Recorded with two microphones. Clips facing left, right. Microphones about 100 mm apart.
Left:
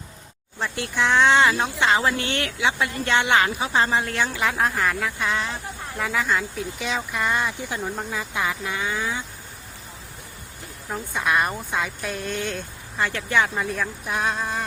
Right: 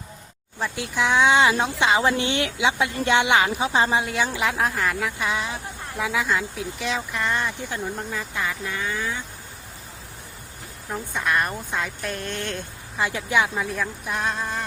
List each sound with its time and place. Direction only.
0.6 s speech: 5° right (ahead or behind); by 9.2 s 15° left (ahead or behind)
10.9 s speech: 5° left (ahead or behind)
13.0 s speech: 15° right (ahead or behind)
13.5 s speech: centre (ahead or behind)